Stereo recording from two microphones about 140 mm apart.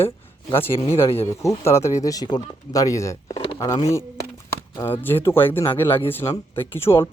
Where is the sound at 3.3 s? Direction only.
40° left (ahead or behind).